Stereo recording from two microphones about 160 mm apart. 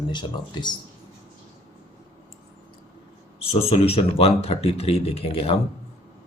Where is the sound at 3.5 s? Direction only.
40° left (ahead or behind).